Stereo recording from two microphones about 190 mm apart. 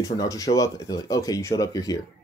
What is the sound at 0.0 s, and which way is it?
Speech, 15° left (ahead or behind).